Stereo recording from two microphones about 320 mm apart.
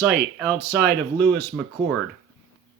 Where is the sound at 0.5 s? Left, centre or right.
Right.